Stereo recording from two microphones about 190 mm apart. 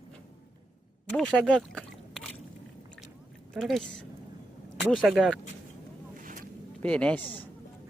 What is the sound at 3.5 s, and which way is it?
A woman's voice, centre (ahead or behind).